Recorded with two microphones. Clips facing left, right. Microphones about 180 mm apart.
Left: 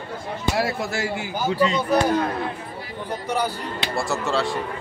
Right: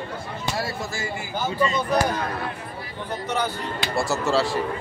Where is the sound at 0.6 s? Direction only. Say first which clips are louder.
Left 6 dB; 65° left (ahead or behind).